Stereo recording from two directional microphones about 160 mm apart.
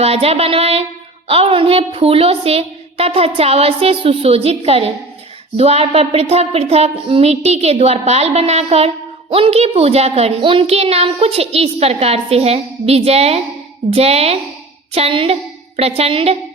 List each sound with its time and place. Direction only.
0.0 s a woman's voice: 40° right (ahead or behind)